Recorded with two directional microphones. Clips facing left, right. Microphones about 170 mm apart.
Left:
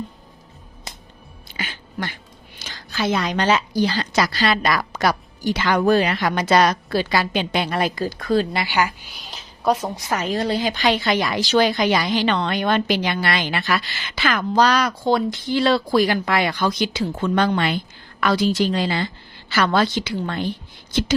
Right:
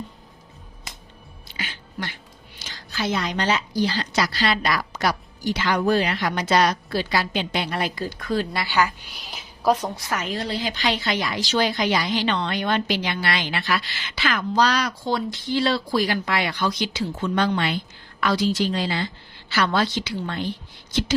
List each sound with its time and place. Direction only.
1.5 s a sound: 50° left (ahead or behind)
2.6 s speech: 60° left (ahead or behind)
4.1 s a woman's voice: 50° left (ahead or behind); by 8.6 s 30° left (ahead or behind)
8.6 s speech: 15° left (ahead or behind)
9.1 s a sound: centre (ahead or behind)
10.1 s a woman's voice: 35° left (ahead or behind)